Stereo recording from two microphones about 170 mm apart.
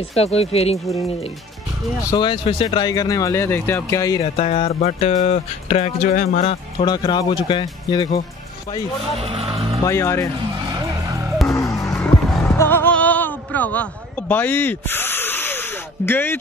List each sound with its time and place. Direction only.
0.1 s speech: 35° left (ahead or behind)
2.0 s speech: 25° left (ahead or behind)
4.2 s speech: 35° left (ahead or behind)
6.9 s speech: 25° left (ahead or behind)
9.2 s speech: 35° right (ahead or behind)
9.8 s speech: 15° left (ahead or behind)
10.7 s vehicle: 15° right (ahead or behind)
11.5 s vehicle: 20° left (ahead or behind)
11.9 s music: 5° left (ahead or behind)
12.5 s a sound: 10° left (ahead or behind)